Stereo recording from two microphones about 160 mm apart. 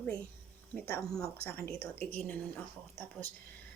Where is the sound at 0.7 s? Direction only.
10° left (ahead or behind).